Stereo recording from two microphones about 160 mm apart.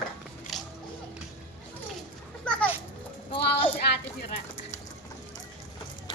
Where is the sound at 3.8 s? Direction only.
90° left.